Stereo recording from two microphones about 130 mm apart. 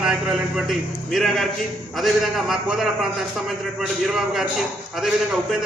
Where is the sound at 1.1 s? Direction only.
Centre (ahead or behind).